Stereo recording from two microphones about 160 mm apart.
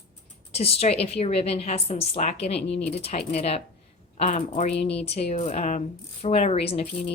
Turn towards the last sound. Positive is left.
turn(degrees=40)  # may be behind; listen again after turning